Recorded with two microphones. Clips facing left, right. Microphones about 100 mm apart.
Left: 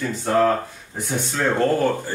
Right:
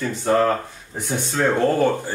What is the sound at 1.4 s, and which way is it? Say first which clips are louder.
Speech: right 2 dB; 15° right (ahead or behind).